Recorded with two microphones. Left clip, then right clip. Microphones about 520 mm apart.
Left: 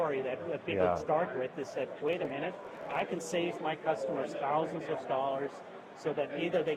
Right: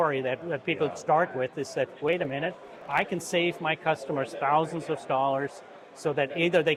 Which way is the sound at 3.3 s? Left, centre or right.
Right.